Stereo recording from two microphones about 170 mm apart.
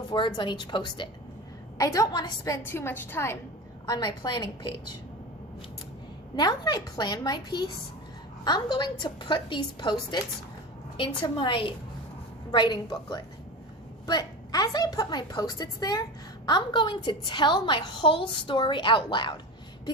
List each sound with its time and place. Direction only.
0.1 s a woman's voice: 25° left (ahead or behind)
3.8 s a woman's voice: 25° left (ahead or behind)
6.3 s a woman's voice: 25° left (ahead or behind)